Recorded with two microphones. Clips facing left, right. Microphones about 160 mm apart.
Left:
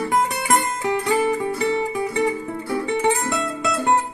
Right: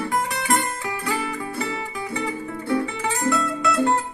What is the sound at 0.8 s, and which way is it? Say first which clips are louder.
Music: left 7 dB; 25° left (ahead or behind).